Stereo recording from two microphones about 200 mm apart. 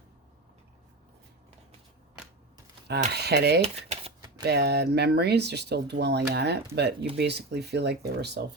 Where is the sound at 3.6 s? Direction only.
30° right (ahead or behind).